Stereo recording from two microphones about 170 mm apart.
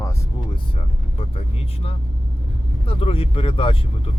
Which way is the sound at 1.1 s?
35° left (ahead or behind).